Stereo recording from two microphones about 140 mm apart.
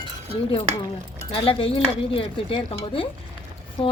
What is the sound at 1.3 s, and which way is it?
Speech, 40° left (ahead or behind).